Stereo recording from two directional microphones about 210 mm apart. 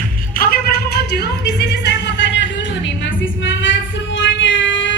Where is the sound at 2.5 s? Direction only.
60° left (ahead or behind).